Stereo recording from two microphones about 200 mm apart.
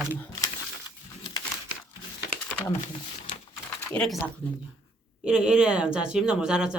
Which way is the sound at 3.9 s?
5° left (ahead or behind).